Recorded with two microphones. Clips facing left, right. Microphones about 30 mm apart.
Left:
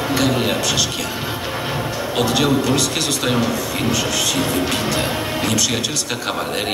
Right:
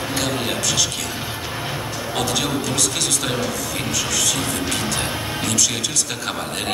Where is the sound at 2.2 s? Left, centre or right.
Centre.